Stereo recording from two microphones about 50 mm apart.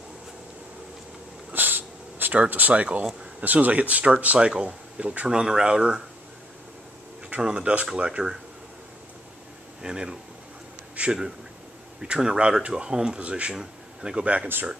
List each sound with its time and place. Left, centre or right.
1.5 s a sound: right
2.3 s speech: right
5.3 s speech: centre
7.2 s speech: right
9.8 s speech: centre
11.0 s speech: right
12.0 s speech: centre